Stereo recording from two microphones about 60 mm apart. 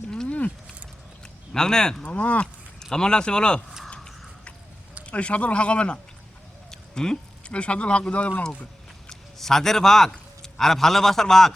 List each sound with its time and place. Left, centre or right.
0.1 s a sound: centre
1.5 s speech: centre
2.0 s speech: left
2.9 s speech: centre
3.8 s a sound: centre
5.0 s speech: left
9.0 s a man's voice: centre